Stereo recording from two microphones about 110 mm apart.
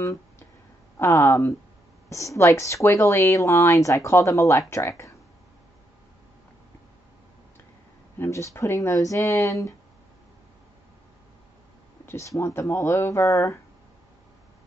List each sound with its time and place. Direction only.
0.0 s guitar: 30° left (ahead or behind)
0.9 s speech: 25° left (ahead or behind)
8.2 s speech: 25° left (ahead or behind)
12.1 s speech: 25° left (ahead or behind)